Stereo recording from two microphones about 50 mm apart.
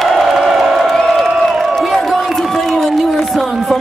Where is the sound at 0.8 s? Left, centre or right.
Centre.